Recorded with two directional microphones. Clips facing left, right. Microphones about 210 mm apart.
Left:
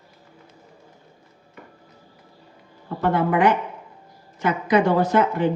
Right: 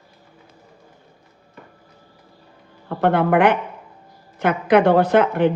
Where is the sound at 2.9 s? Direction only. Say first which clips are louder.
Right 4 dB; 60° right (ahead or behind).